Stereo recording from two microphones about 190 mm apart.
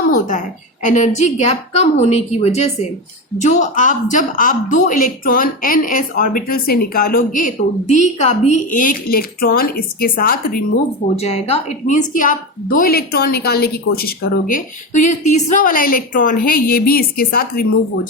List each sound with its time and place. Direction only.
0.1 s a woman's voice: 45° left (ahead or behind)
11.2 s a woman's voice: 35° left (ahead or behind); by 17.7 s 50° left (ahead or behind)